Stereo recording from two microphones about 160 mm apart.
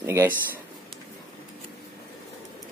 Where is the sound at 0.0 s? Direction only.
15° right (ahead or behind).